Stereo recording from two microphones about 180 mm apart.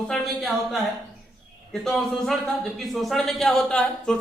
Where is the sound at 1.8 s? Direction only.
Centre (ahead or behind).